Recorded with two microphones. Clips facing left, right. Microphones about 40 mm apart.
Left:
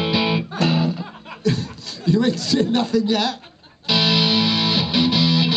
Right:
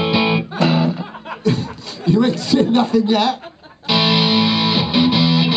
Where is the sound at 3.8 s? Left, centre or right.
Centre.